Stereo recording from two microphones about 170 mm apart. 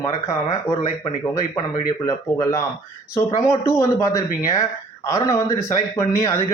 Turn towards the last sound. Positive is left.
turn(degrees=15)  # may be behind; listen again after turning